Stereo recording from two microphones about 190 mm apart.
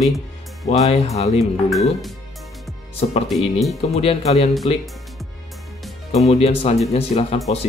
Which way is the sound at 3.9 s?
30° left (ahead or behind).